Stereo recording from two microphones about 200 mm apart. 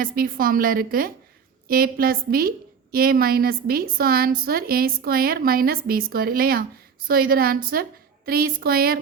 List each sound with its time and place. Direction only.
0.0 s a woman's voice: 45° right (ahead or behind)